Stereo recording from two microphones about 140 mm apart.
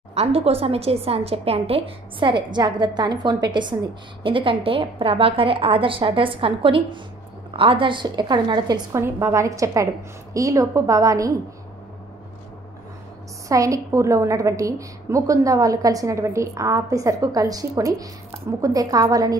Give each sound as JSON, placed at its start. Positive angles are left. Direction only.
{"t": 0.1, "sound": "a woman's voice", "side_deg": -45}
{"t": 13.5, "sound": "a woman's voice", "side_deg": -25}